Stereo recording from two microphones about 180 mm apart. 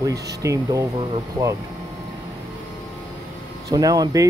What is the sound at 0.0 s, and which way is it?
Speech, 20° right (ahead or behind).